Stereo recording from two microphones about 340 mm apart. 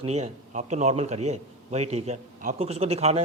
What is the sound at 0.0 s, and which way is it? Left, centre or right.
Speech, centre.